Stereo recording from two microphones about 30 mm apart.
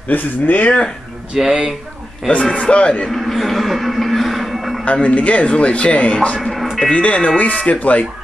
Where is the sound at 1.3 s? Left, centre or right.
Right.